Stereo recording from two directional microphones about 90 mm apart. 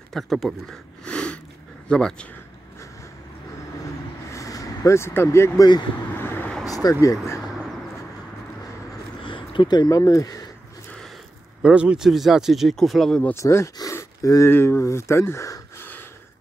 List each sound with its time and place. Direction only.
0.1 s speech: centre (ahead or behind)
1.0 s sniff: 10° left (ahead or behind)
1.9 s speech: 10° left (ahead or behind)
4.3 s vehicle: 35° left (ahead or behind)
6.6 s a sound: 40° left (ahead or behind)
9.2 s a sound: 65° left (ahead or behind)
9.8 s speech: 40° left (ahead or behind)
11.6 s speech: 10° right (ahead or behind)
13.3 s speech: 30° left (ahead or behind)
15.8 s a sound: 25° left (ahead or behind)